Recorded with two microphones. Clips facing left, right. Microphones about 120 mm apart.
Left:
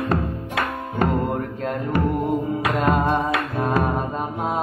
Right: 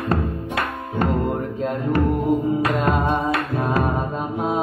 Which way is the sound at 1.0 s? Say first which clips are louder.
Even; centre (ahead or behind).